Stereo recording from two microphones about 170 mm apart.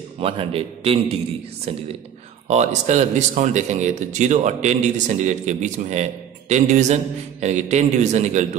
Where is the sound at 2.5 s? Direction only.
40° right (ahead or behind).